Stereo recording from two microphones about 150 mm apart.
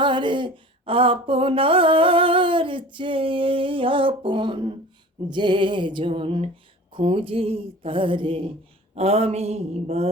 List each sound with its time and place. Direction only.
0.0 s music: 35° right (ahead or behind)
9.0 s mantra: 45° right (ahead or behind)